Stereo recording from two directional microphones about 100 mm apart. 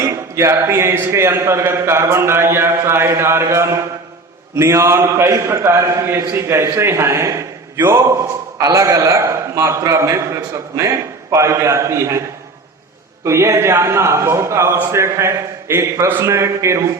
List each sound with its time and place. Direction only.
0.0 s a man's voice: 30° right (ahead or behind)
13.2 s speech: 30° right (ahead or behind)